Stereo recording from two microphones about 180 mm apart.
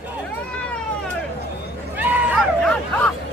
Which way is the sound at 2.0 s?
10° right (ahead or behind).